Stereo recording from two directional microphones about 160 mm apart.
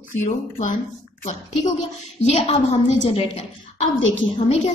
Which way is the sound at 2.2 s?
40° left (ahead or behind).